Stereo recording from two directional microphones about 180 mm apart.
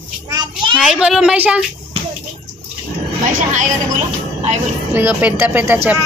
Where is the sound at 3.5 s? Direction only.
45° right (ahead or behind).